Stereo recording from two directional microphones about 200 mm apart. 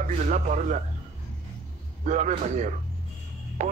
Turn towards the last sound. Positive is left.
turn(degrees=-35)  # may be behind; listen again after turning